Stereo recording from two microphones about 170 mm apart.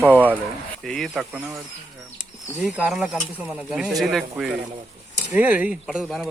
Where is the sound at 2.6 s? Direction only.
5° right (ahead or behind).